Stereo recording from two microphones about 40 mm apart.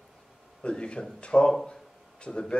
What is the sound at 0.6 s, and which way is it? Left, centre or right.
Speech, left.